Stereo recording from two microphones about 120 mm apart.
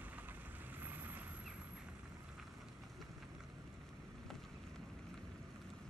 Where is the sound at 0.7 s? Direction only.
15° right (ahead or behind).